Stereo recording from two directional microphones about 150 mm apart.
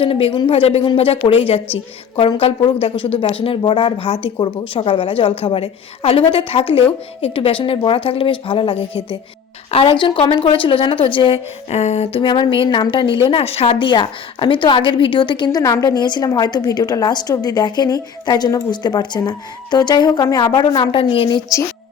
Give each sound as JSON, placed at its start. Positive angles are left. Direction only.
{"t": 0.0, "sound": "a woman's voice", "side_deg": 35}